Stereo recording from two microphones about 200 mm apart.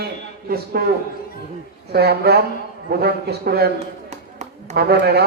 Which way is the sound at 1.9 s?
55° right (ahead or behind).